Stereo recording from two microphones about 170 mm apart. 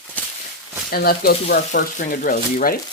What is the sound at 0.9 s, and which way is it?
Speech, 65° left (ahead or behind).